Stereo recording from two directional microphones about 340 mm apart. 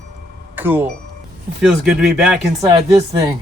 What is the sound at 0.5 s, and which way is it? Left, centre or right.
Speech, centre.